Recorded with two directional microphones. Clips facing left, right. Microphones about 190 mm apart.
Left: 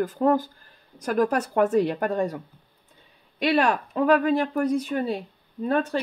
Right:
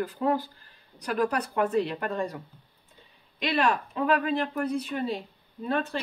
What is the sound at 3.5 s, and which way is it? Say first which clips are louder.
Speech: left 2 dB; 45° left (ahead or behind).